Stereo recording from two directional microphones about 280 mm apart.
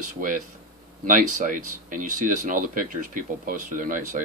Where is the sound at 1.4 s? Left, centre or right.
Right.